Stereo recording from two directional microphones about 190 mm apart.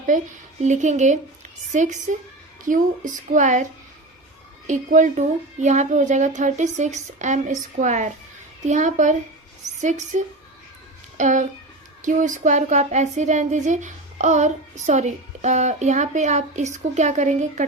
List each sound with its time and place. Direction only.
0.1 s speech: 45° right (ahead or behind)
11.2 s speech: 40° right (ahead or behind)